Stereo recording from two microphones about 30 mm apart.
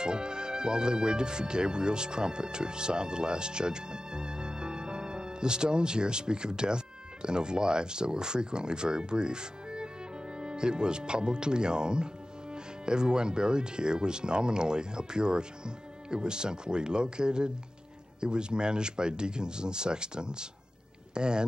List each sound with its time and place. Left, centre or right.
0.0 s speech: right